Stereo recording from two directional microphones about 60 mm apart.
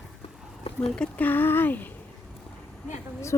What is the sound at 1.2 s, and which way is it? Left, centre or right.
Speech, left.